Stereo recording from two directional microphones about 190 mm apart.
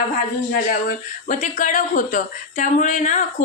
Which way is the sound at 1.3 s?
40° left (ahead or behind).